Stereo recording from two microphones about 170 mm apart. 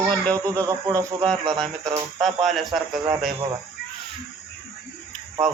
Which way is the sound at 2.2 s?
Centre (ahead or behind).